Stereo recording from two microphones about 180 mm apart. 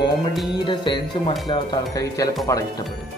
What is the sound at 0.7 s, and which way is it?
Speech, 25° left (ahead or behind).